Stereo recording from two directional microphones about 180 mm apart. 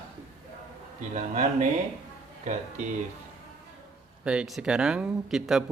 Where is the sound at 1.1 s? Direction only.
40° right (ahead or behind).